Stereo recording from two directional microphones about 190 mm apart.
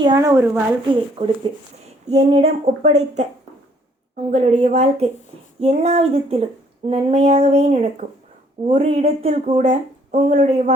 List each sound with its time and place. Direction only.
0.0 s a woman's voice: 20° right (ahead or behind)
1.2 s speech: 30° right (ahead or behind)
4.3 s speech: 35° right (ahead or behind)